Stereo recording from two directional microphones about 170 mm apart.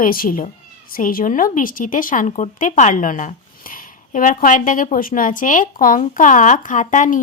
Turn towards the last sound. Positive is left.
turn(degrees=45)  # may be behind; listen again after turning